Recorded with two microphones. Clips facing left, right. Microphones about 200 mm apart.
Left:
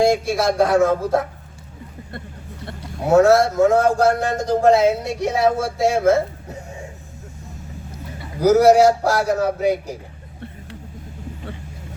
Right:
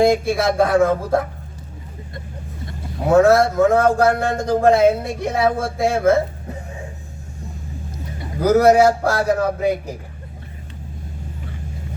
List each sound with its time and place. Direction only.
0.0 s speech: 55° right (ahead or behind)
3.1 s speech: 55° right (ahead or behind)
8.4 s speech: 55° right (ahead or behind)